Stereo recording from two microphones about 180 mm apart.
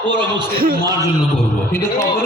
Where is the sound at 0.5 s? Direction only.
55° right (ahead or behind).